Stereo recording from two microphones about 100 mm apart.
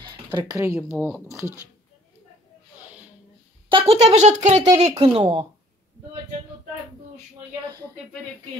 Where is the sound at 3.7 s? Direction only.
75° right (ahead or behind).